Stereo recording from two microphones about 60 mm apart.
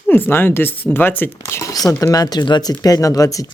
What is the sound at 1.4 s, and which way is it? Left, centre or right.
Speech, left.